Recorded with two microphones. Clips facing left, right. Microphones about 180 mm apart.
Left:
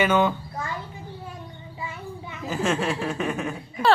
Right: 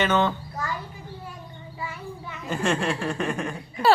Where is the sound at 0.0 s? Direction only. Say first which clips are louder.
Left 2 dB; 10° left (ahead or behind).